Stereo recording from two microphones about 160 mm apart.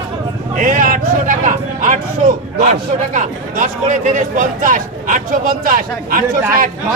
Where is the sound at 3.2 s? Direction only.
50° right (ahead or behind).